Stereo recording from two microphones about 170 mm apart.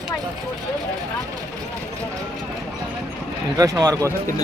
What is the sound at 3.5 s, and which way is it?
Speech, 20° right (ahead or behind).